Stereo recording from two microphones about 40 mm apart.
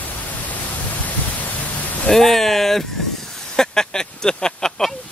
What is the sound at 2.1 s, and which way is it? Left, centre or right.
Speech, centre.